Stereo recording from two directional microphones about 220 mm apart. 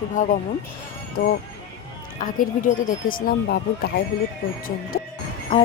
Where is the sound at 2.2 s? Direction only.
40° left (ahead or behind).